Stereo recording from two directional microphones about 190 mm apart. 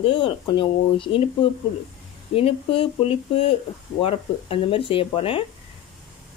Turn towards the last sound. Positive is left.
turn(degrees=30)  # may be behind; listen again after turning